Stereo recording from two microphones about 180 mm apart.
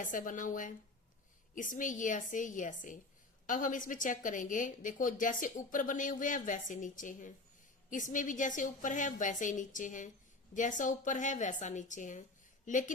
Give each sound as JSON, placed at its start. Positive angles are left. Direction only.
{"t": 0.0, "sound": "speech", "side_deg": 50}